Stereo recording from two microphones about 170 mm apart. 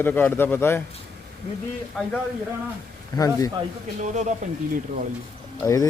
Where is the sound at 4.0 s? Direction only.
45° right (ahead or behind).